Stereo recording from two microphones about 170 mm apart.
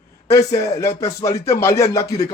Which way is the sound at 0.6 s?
20° left (ahead or behind).